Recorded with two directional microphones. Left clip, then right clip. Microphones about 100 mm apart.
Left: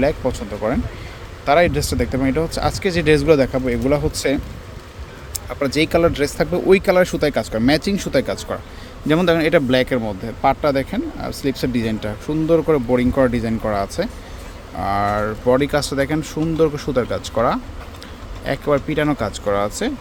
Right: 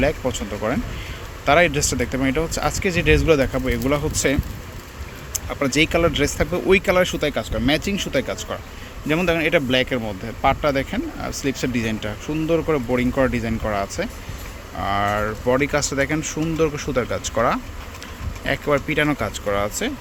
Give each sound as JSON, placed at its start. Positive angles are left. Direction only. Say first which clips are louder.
{"t": 0.2, "sound": "speech", "louder": "left 2 dB", "side_deg": 10}
{"t": 0.6, "sound": "speech", "louder": "left 3 dB", "side_deg": 25}
{"t": 2.8, "sound": "speech", "louder": "left 3 dB", "side_deg": 45}
{"t": 10.4, "sound": "speech", "louder": "left 2 dB", "side_deg": 30}
{"t": 14.8, "sound": "speech", "louder": "left 2 dB", "side_deg": 25}
{"t": 18.4, "sound": "speech", "louder": "left 1 dB", "side_deg": 25}
{"t": 19.5, "sound": "speech", "louder": "left 1 dB", "side_deg": 40}